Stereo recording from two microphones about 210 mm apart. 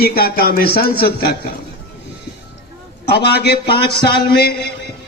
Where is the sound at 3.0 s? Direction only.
50° left (ahead or behind).